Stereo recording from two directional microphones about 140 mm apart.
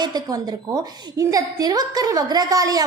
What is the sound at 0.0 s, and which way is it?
A woman's voice, 30° right (ahead or behind).